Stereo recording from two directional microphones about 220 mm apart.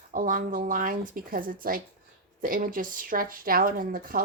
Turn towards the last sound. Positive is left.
turn(degrees=-40)  # may be behind; listen again after turning